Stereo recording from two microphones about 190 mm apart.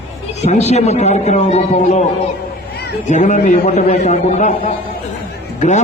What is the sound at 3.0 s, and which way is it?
A man's voice, 40° left (ahead or behind).